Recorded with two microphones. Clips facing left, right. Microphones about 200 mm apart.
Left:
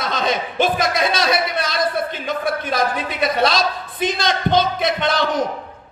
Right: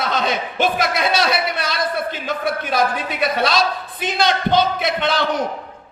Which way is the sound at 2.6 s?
55° right (ahead or behind).